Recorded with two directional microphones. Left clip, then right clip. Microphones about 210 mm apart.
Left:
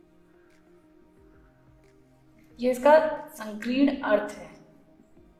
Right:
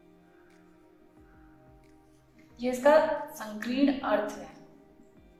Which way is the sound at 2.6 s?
45° left (ahead or behind).